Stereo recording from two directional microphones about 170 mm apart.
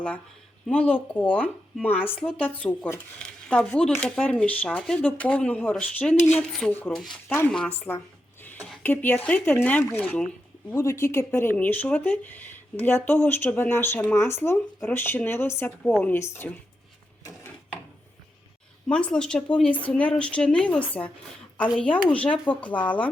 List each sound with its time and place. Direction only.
0.7 s speech: 10° left (ahead or behind)
18.9 s speech: 5° left (ahead or behind)